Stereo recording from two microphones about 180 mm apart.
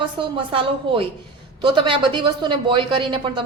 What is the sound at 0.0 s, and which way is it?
Speech, 30° right (ahead or behind).